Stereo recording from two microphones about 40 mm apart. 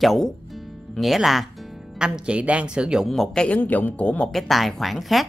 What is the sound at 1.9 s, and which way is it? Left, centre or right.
Speech, right.